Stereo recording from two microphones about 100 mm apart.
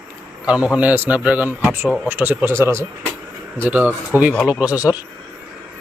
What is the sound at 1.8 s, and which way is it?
Speech, 10° left (ahead or behind).